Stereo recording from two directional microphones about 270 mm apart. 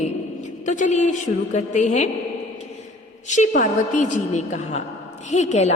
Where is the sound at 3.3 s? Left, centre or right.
Left.